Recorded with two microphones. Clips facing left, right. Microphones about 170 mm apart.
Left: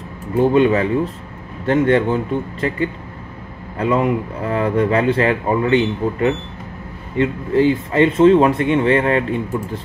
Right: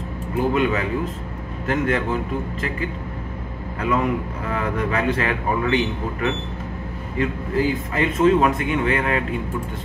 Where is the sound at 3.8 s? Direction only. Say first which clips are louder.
Left 4 dB; 30° left (ahead or behind).